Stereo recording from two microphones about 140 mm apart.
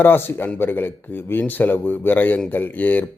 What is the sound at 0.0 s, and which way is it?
Speech, 15° left (ahead or behind).